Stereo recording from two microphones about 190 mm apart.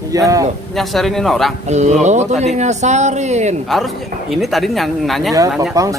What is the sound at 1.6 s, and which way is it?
Speech, 35° right (ahead or behind).